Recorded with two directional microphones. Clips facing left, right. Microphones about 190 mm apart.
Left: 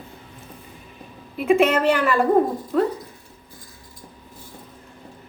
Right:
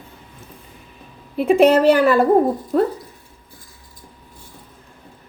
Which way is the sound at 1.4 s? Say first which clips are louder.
Right 5 dB; 35° right (ahead or behind).